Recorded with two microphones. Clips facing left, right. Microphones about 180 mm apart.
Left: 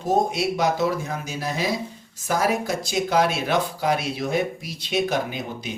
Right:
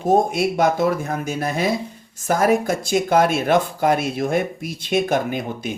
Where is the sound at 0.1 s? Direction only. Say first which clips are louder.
Right 4 dB; 50° right (ahead or behind).